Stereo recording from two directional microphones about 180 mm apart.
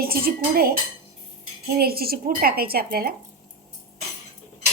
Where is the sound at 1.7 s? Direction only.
55° right (ahead or behind).